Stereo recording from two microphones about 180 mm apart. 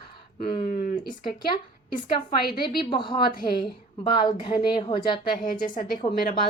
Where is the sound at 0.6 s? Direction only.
45° left (ahead or behind).